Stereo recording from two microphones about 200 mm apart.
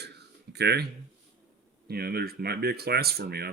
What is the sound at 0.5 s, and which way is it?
Speech, 55° right (ahead or behind).